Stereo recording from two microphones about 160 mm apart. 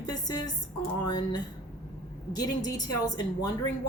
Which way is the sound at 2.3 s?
25° left (ahead or behind).